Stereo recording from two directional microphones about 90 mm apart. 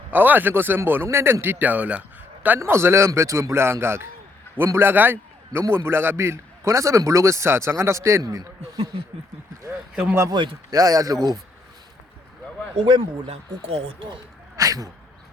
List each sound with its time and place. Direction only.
0.1 s a man's voice: 20° right (ahead or behind)
2.6 s a man's voice: 30° right (ahead or behind); by 8.8 s 45° right (ahead or behind)
9.9 s speech: 15° right (ahead or behind)
10.7 s speech: 40° right (ahead or behind)
12.8 s speech: 75° right (ahead or behind)
14.5 s a sound: 40° right (ahead or behind)